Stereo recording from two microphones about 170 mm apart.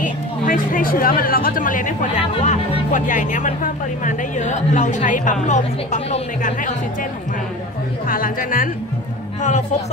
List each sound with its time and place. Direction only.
0.0 s speech: 55° left (ahead or behind)
8.1 s a woman's voice: 55° left (ahead or behind)